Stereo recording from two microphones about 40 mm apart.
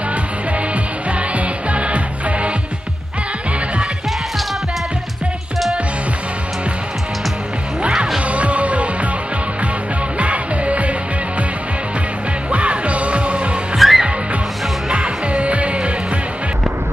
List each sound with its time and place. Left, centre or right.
1.1 s music: right
8.2 s music: right
10.1 s music: right
12.4 s music: right
13.7 s music: centre
14.9 s music: right